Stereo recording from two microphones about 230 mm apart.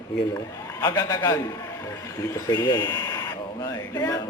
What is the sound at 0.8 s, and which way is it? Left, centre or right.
Speech, centre.